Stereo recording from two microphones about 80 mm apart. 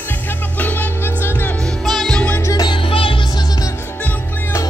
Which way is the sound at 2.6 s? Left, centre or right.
Left.